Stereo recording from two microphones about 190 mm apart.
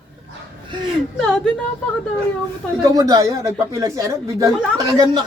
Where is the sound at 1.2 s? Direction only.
5° left (ahead or behind).